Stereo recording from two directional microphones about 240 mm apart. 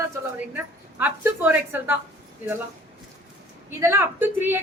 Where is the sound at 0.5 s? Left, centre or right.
Centre.